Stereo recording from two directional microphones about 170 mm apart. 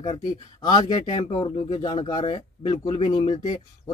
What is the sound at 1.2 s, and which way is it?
Speech, 35° left (ahead or behind).